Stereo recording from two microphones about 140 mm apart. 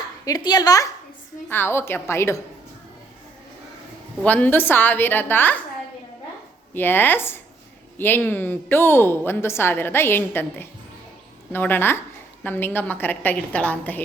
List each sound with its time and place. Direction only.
0.3 s a woman's voice: 30° left (ahead or behind)
1.5 s a woman's voice: 15° left (ahead or behind)
4.2 s a woman's voice: 10° left (ahead or behind)
6.7 s a woman's voice: 15° left (ahead or behind)